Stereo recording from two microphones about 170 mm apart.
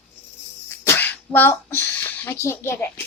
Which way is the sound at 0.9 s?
10° left (ahead or behind).